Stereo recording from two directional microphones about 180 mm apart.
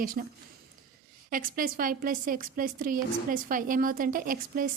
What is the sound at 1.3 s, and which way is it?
A woman's voice, 50° right (ahead or behind).